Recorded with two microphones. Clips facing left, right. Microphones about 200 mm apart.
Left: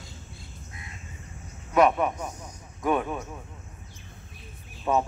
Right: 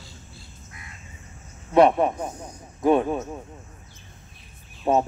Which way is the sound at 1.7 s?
30° right (ahead or behind).